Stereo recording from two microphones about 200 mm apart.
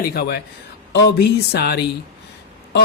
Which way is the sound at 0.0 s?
50° left (ahead or behind).